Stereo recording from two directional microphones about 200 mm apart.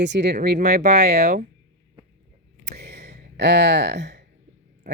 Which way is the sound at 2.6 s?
55° right (ahead or behind).